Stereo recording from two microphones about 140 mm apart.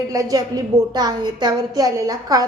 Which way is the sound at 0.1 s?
25° right (ahead or behind).